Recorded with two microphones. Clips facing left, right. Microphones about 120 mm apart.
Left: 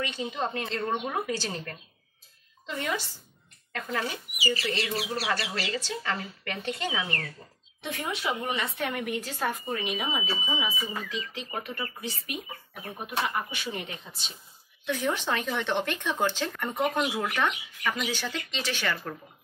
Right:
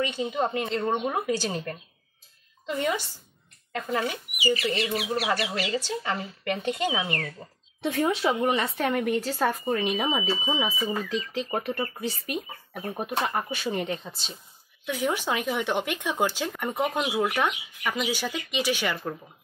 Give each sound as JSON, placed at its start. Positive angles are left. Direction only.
{"t": 0.0, "sound": "speech", "side_deg": -15}
{"t": 2.6, "sound": "speech", "side_deg": -20}
{"t": 7.9, "sound": "speech", "side_deg": -35}
{"t": 14.9, "sound": "speech", "side_deg": -10}